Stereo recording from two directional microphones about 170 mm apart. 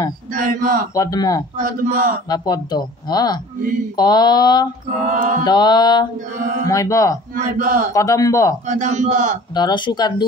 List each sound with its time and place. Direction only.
0.3 s a man's voice: 50° right (ahead or behind)
0.9 s speech: 20° left (ahead or behind)
1.6 s a man's voice: 55° right (ahead or behind)
2.2 s speech: 25° left (ahead or behind)
5.0 s a man's voice: 50° right (ahead or behind)
5.4 s speech: 25° left (ahead or behind)
7.3 s a man's voice: 55° right (ahead or behind)
7.9 s speech: 20° left (ahead or behind)
8.6 s a man's voice: 45° right (ahead or behind)
9.5 s speech: 25° left (ahead or behind)